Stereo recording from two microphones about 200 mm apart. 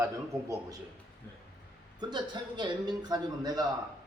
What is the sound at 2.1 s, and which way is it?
A man's voice, 20° right (ahead or behind).